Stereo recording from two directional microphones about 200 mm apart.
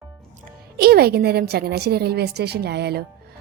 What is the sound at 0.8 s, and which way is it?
A woman's voice, 50° right (ahead or behind).